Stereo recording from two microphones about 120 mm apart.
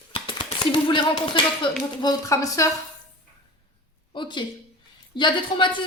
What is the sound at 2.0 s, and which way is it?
Speech, 30° left (ahead or behind).